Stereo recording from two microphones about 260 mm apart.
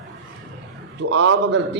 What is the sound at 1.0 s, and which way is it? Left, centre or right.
Speech, right.